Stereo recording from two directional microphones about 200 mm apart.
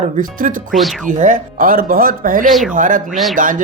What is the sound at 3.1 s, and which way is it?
Speech, centre (ahead or behind).